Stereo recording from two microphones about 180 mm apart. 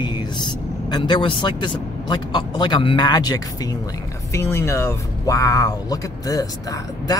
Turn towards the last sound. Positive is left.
turn(degrees=20)  # may be behind; listen again after turning